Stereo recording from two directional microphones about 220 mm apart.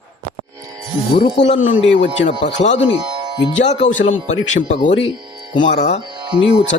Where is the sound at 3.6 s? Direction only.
30° left (ahead or behind).